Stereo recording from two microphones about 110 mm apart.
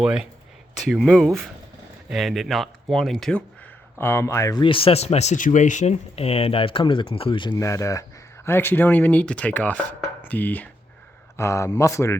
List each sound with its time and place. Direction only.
0.0 s speech: 5° right (ahead or behind)
3.9 s speech: 20° left (ahead or behind)
4.5 s speech: 55° left (ahead or behind)
7.5 s speech: 30° left (ahead or behind)
11.3 s speech: 25° left (ahead or behind)